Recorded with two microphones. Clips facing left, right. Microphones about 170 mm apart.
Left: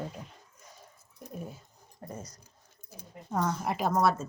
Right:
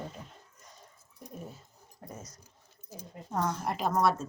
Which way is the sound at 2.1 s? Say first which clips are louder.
Left 3 dB; 5° right (ahead or behind).